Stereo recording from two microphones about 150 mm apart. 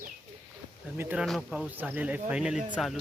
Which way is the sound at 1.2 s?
Centre (ahead or behind).